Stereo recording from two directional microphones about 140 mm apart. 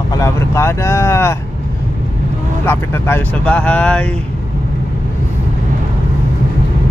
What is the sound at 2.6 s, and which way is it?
Speech, 15° left (ahead or behind).